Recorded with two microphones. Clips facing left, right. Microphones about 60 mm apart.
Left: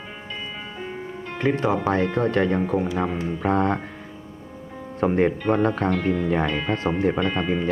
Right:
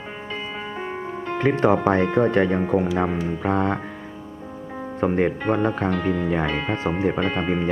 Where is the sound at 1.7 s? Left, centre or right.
Right.